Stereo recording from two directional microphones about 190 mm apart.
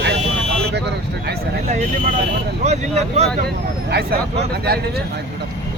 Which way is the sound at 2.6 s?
35° right (ahead or behind).